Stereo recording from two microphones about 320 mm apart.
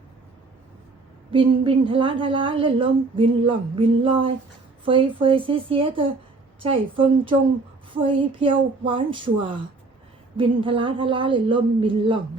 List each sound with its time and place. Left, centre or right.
1.3 s a woman's voice: centre